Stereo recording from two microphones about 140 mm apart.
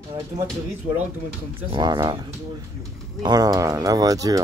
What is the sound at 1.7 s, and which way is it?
Speech, 30° right (ahead or behind).